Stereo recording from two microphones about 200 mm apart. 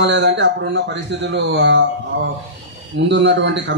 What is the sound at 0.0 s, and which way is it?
A man's voice, 60° right (ahead or behind).